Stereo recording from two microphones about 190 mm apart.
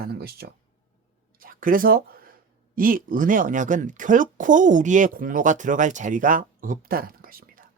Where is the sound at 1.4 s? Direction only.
45° right (ahead or behind).